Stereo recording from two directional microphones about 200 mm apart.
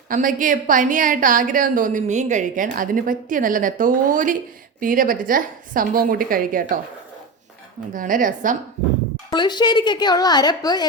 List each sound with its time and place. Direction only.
0.1 s a woman's voice: 40° right (ahead or behind)
7.9 s a woman's voice: 40° right (ahead or behind)
9.3 s a woman's voice: 20° left (ahead or behind)